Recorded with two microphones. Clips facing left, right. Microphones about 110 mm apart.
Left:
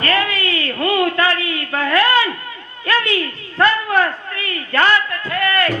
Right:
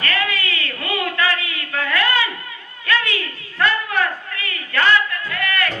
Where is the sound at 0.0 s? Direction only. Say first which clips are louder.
Left 4 dB; 35° left (ahead or behind).